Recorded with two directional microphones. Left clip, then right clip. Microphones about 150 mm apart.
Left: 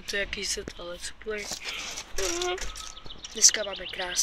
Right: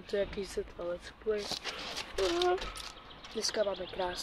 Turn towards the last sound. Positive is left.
turn(degrees=0)  # may be behind; listen again after turning